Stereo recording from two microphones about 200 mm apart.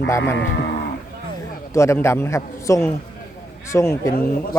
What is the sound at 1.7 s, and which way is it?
A man's voice, 15° left (ahead or behind).